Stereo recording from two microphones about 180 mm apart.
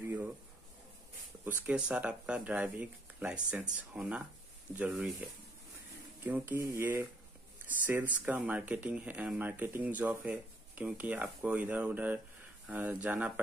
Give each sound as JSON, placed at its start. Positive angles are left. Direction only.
{"t": 1.4, "sound": "speech", "side_deg": -5}
{"t": 6.2, "sound": "speech", "side_deg": -10}